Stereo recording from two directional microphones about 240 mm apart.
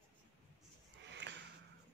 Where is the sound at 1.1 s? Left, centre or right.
Right.